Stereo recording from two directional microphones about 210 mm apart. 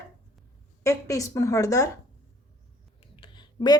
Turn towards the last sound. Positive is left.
turn(degrees=20)  # may be behind; listen again after turning